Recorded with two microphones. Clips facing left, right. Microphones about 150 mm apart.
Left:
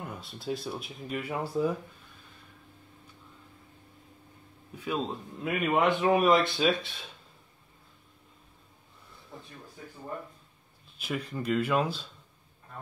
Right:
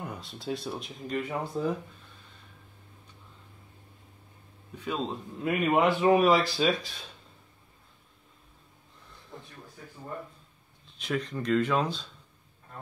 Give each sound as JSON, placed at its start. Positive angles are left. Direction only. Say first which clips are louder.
{"t": 0.0, "sound": "a man's voice", "louder": "right 1 dB", "side_deg": 0}
{"t": 4.7, "sound": "a man's voice", "louder": "even", "side_deg": 5}
{"t": 11.0, "sound": "speech", "louder": "right 2 dB", "side_deg": 5}